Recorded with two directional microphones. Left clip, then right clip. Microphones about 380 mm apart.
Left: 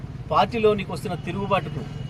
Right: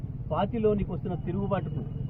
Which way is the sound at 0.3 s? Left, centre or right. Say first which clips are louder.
Left 7 dB; left.